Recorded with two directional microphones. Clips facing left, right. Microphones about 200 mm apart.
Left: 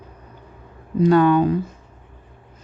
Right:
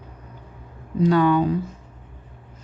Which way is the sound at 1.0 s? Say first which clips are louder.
Left 3 dB; 50° left (ahead or behind).